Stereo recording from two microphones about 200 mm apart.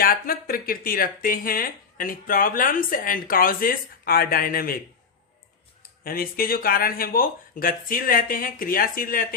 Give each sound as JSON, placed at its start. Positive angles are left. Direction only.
{"t": 0.0, "sound": "speech", "side_deg": 45}
{"t": 6.1, "sound": "speech", "side_deg": 45}